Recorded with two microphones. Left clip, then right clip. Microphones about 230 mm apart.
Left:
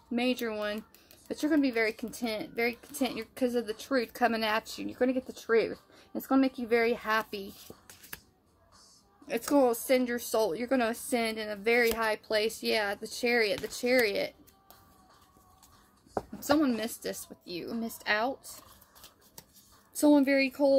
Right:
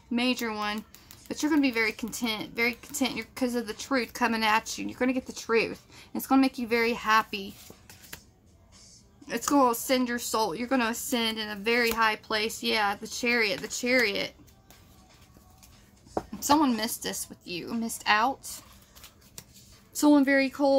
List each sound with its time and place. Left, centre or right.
0.1 s speech: centre
8.1 s music: left
9.3 s speech: centre
16.4 s speech: centre
19.9 s speech: centre